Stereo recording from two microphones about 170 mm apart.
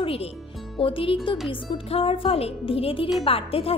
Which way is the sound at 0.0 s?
35° left (ahead or behind).